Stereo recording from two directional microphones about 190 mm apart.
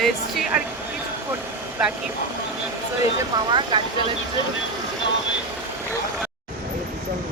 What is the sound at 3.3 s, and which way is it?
Speech, 25° right (ahead or behind).